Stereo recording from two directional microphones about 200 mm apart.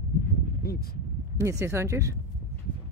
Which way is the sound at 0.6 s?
50° left (ahead or behind).